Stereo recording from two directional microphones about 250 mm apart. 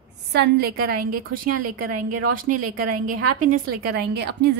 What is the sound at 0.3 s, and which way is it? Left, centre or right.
Speech, right.